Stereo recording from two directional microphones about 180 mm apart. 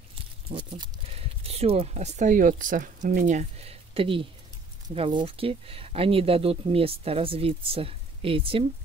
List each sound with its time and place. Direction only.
0.5 s speech: 25° right (ahead or behind)